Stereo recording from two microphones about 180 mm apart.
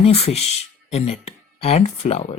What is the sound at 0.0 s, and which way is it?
Speech, 35° left (ahead or behind).